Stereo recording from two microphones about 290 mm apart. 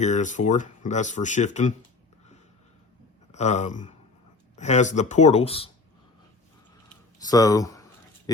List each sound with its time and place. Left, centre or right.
0.0 s speech: left
3.3 s speech: left
7.2 s speech: centre